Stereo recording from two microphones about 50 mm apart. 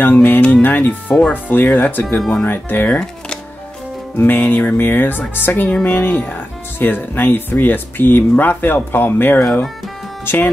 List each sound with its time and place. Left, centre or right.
0.0 s speech: left
2.1 s speech: centre
2.4 s speech: left
2.9 s music: centre
4.2 s speech: left